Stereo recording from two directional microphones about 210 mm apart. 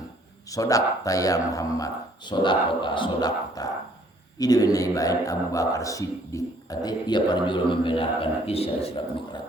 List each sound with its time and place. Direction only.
0.5 s speech: 15° left (ahead or behind)